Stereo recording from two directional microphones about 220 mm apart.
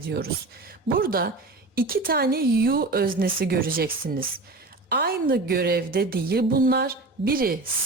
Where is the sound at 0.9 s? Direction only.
40° right (ahead or behind).